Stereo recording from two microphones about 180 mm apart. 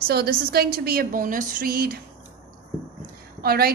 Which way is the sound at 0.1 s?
60° right (ahead or behind).